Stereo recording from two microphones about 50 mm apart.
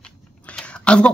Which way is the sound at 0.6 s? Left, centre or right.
Centre.